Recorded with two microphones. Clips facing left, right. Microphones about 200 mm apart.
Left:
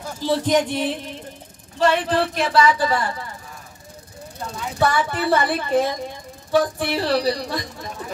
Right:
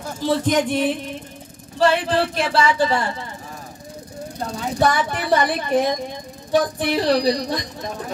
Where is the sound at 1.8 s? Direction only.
30° right (ahead or behind).